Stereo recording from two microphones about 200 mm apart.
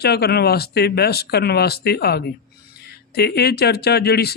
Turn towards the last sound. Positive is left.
turn(degrees=50)  # may be behind; listen again after turning